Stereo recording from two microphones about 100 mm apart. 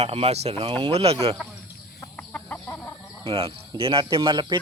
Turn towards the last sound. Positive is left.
turn(degrees=-50)  # may be behind; listen again after turning